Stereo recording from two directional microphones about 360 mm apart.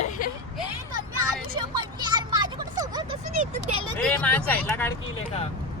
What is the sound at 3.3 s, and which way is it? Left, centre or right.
Speech, right.